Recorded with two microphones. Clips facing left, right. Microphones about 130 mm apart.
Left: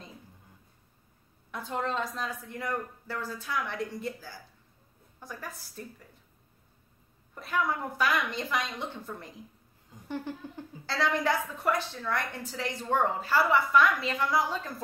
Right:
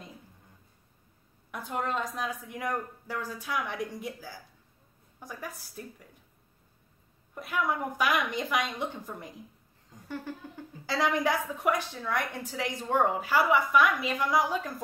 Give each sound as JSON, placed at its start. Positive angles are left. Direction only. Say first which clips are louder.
{"t": 1.5, "sound": "a woman's voice", "louder": "even", "side_deg": -10}
{"t": 7.3, "sound": "a woman's voice", "louder": "even", "side_deg": -10}
{"t": 10.0, "sound": "a sound", "louder": "left 2 dB", "side_deg": 20}
{"t": 10.9, "sound": "a woman's voice", "louder": "right 1 dB", "side_deg": -15}